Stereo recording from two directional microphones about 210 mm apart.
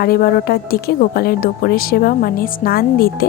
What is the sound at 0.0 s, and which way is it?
Speech, 45° left (ahead or behind).